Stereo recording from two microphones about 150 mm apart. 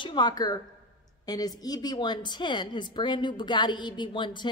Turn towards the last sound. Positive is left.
turn(degrees=30)  # may be behind; listen again after turning